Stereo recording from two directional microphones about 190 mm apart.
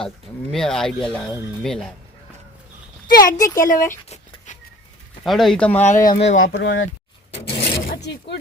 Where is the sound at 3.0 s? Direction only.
50° left (ahead or behind).